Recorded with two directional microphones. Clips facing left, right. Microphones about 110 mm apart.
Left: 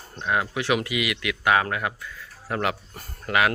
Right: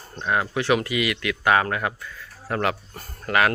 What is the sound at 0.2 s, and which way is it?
Speech, 5° left (ahead or behind).